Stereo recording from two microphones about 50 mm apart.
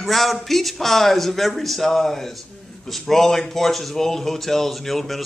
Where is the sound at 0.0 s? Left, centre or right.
Centre.